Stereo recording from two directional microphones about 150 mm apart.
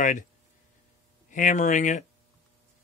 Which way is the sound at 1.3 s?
55° left (ahead or behind).